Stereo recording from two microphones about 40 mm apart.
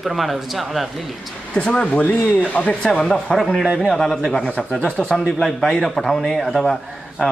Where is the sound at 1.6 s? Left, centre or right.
Left.